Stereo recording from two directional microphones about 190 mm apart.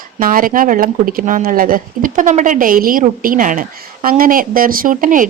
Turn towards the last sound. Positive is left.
turn(degrees=-45)  # may be behind; listen again after turning